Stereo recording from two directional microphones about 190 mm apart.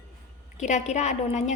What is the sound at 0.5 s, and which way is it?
A woman's voice, 40° left (ahead or behind).